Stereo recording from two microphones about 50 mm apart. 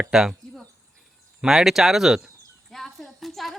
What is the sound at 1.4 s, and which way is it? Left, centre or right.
Speech, centre.